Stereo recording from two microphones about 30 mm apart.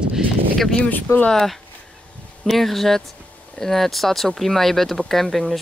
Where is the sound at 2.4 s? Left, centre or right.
Centre.